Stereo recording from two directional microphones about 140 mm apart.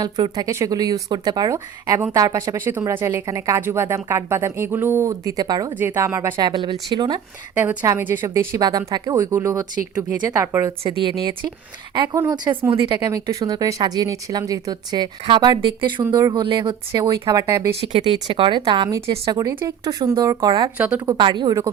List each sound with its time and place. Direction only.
0.0 s a woman's voice: 25° right (ahead or behind)
5.8 s a woman's voice: 15° right (ahead or behind)
7.5 s a woman's voice: 15° right (ahead or behind)
10.7 s a woman's voice: 35° right (ahead or behind)
17.7 s a woman's voice: 40° right (ahead or behind)
20.7 s a woman's voice: 10° right (ahead or behind)
21.1 s speech: 35° right (ahead or behind)